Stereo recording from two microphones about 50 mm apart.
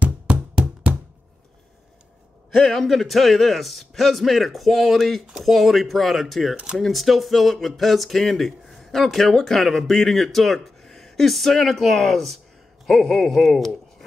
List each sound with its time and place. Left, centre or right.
0.0 s music: right
2.5 s speech: centre
6.5 s speech: centre
6.8 s speech: centre